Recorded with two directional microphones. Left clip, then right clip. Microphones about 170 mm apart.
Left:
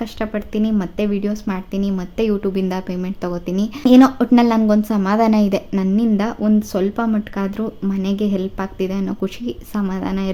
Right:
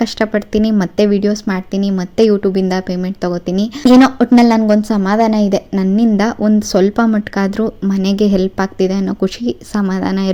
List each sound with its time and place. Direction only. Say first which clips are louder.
0.0 s speech: right 8 dB; 30° right (ahead or behind)